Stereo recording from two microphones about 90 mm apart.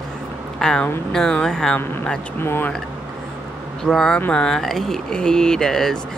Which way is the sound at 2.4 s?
25° left (ahead or behind).